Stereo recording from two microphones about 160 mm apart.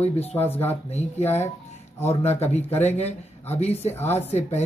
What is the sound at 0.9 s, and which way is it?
A man's voice, 40° left (ahead or behind).